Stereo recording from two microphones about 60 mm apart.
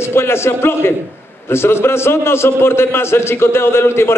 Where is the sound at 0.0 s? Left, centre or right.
Left.